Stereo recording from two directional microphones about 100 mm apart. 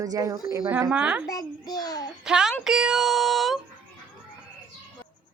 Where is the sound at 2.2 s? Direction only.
5° right (ahead or behind).